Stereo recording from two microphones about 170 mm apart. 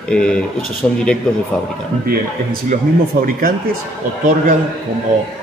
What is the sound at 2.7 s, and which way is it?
Speech, 55° right (ahead or behind).